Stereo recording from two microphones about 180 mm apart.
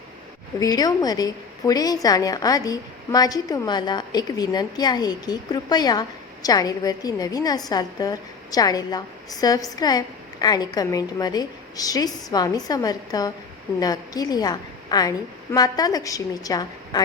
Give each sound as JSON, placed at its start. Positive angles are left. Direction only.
{"t": 0.6, "sound": "a woman's voice", "side_deg": 20}